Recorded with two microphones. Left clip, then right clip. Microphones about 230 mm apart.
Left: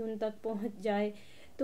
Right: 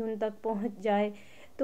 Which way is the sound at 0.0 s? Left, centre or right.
Right.